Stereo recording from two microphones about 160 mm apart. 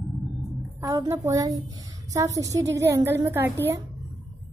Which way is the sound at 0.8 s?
25° right (ahead or behind).